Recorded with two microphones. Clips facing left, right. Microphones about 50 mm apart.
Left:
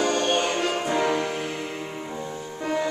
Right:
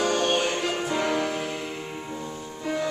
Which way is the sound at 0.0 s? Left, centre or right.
Centre.